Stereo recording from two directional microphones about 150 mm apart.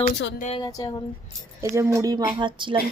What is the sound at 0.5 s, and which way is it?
Speech, 25° left (ahead or behind).